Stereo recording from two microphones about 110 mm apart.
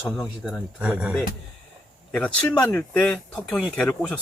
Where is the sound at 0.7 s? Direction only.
10° right (ahead or behind).